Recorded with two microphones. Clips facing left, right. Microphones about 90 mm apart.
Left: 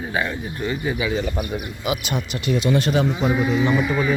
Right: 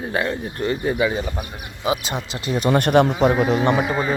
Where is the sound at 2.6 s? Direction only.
55° right (ahead or behind).